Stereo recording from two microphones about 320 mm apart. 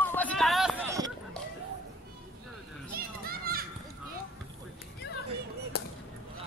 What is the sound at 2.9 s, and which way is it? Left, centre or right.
Children playing, right.